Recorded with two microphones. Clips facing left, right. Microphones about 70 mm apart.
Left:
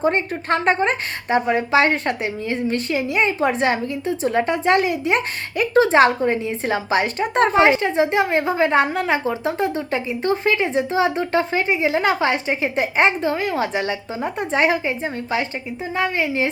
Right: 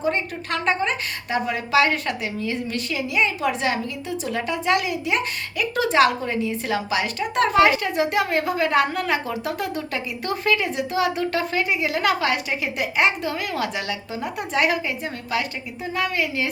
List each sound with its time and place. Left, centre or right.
0.0 s a woman's voice: left